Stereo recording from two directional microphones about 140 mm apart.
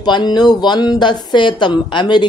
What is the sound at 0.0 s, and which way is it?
Speech, 30° left (ahead or behind).